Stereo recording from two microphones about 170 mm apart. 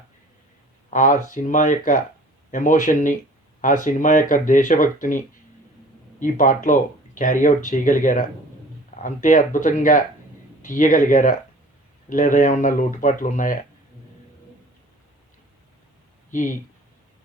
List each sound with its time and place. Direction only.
0.9 s speech: 50° left (ahead or behind)
16.3 s speech: 50° left (ahead or behind)